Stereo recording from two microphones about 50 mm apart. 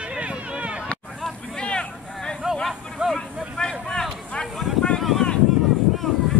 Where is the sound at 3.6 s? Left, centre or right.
Centre.